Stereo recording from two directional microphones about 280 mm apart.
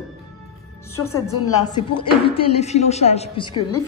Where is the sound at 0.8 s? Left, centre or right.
Centre.